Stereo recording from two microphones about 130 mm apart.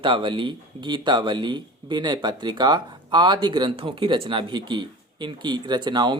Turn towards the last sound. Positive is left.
turn(degrees=-35)  # may be behind; listen again after turning